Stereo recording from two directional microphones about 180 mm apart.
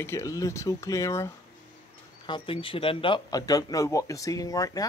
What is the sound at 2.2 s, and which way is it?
Speech, 30° left (ahead or behind).